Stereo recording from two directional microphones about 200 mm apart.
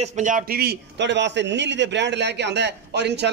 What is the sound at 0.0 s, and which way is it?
A man's voice, 35° right (ahead or behind).